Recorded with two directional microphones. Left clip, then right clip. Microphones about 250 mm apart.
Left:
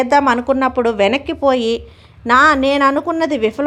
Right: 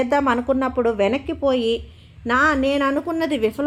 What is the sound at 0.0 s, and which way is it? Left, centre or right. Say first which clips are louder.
A woman's voice: left 6 dB; centre.